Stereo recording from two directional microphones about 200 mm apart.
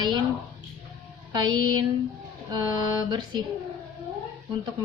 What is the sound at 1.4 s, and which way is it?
A woman's voice, 20° right (ahead or behind).